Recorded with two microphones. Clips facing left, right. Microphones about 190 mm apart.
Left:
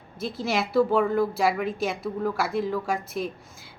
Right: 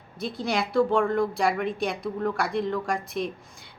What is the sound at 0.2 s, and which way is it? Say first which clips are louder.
Speech: left 1 dB; centre (ahead or behind).